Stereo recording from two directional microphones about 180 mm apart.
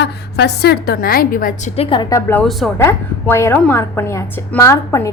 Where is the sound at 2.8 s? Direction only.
15° left (ahead or behind).